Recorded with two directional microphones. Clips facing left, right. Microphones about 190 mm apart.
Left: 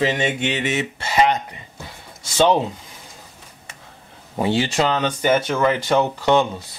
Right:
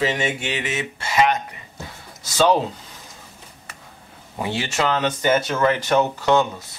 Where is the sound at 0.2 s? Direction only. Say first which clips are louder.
Left 3 dB; 25° left (ahead or behind).